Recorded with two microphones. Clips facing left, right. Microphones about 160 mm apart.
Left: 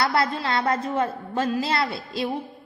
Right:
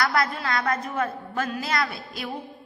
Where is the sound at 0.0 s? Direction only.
25° left (ahead or behind).